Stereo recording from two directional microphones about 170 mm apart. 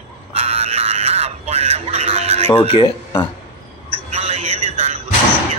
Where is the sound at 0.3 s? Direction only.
35° right (ahead or behind).